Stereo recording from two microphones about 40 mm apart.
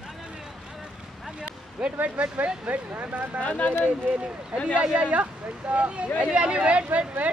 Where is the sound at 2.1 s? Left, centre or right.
Right.